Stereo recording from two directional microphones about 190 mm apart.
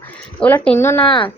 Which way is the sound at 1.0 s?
25° left (ahead or behind).